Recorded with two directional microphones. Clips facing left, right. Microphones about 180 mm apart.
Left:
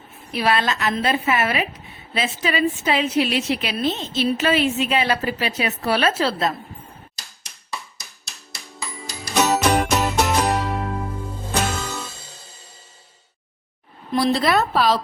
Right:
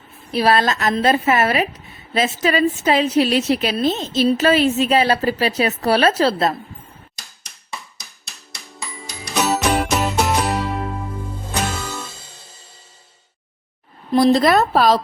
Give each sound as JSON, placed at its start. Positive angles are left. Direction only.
{"t": 0.3, "sound": "a woman's voice", "side_deg": -35}
{"t": 7.7, "sound": "music", "side_deg": 0}
{"t": 14.1, "sound": "a woman's voice", "side_deg": -40}